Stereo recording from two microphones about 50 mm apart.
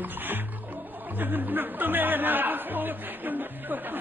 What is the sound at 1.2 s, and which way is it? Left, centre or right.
Speech, right.